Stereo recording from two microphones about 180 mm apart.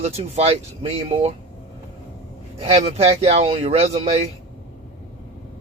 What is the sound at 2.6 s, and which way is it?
A man's voice, 35° right (ahead or behind).